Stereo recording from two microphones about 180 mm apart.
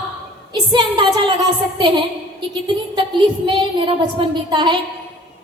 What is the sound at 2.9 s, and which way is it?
A woman's voice, 25° right (ahead or behind).